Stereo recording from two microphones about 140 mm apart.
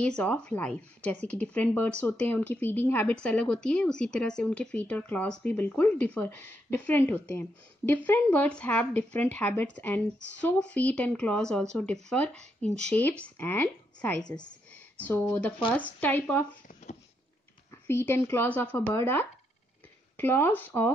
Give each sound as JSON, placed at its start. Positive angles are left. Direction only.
{"t": 0.2, "sound": "speech", "side_deg": 10}
{"t": 17.6, "sound": "speech", "side_deg": 15}